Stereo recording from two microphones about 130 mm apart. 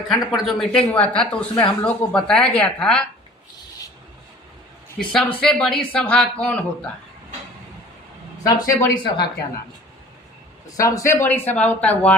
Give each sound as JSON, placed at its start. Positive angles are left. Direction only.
{"t": 0.1, "sound": "speech", "side_deg": 0}
{"t": 4.9, "sound": "speech", "side_deg": 5}
{"t": 8.5, "sound": "speech", "side_deg": 30}
{"t": 10.7, "sound": "speech", "side_deg": 25}